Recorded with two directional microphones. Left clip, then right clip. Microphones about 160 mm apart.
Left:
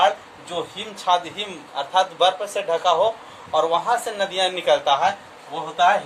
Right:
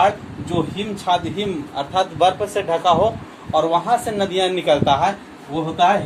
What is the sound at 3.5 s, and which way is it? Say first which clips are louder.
A man's voice: right 2 dB; 30° left (ahead or behind).